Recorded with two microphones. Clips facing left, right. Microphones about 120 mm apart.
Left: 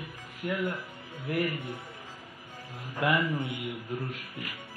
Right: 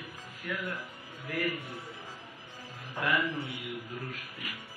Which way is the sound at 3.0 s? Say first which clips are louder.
Left 3 dB; 20° left (ahead or behind).